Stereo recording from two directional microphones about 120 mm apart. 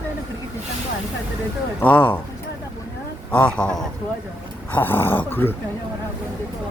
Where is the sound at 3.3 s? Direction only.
10° left (ahead or behind).